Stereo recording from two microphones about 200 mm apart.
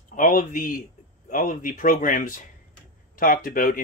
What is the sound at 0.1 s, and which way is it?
A man's voice, 40° left (ahead or behind).